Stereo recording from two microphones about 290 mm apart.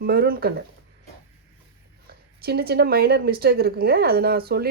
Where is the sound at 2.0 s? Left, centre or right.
Right.